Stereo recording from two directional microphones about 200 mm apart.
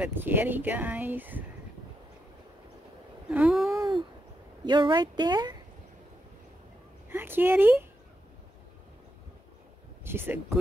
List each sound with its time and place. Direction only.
0.0 s speech: 10° right (ahead or behind)
3.3 s a sound: 5° right (ahead or behind)
4.6 s speech: 25° right (ahead or behind)
7.1 s speech: 10° right (ahead or behind)
10.0 s speech: 10° right (ahead or behind)